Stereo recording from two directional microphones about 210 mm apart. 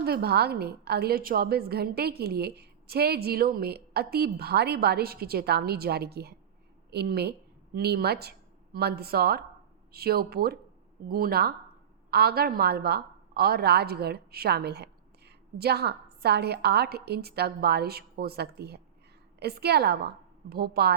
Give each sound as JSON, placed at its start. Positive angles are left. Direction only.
{"t": 0.0, "sound": "a woman's voice", "side_deg": -50}